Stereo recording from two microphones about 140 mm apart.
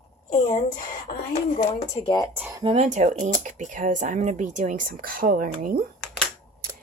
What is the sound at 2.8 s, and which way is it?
Speech, 60° right (ahead or behind).